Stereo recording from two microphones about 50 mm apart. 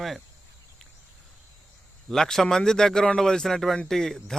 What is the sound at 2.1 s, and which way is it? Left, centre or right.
A man's voice, centre.